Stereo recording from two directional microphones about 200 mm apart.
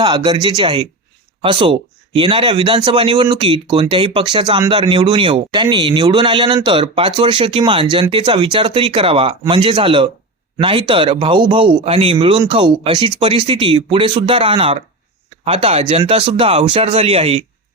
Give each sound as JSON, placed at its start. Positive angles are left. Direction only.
{"t": 0.0, "sound": "speech", "side_deg": -20}